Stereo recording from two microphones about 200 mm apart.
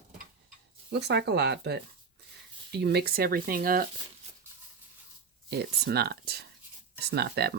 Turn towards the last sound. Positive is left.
turn(degrees=-55)  # may be behind; listen again after turning